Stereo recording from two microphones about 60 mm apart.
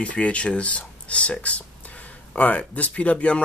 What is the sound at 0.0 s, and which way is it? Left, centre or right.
Speech, left.